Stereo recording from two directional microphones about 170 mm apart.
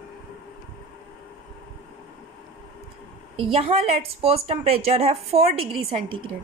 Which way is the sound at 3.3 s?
35° right (ahead or behind).